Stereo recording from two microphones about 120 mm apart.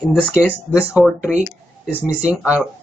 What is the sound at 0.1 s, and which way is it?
A woman's voice, 5° right (ahead or behind).